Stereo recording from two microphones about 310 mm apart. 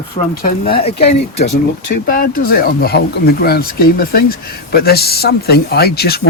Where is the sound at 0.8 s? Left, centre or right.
Left.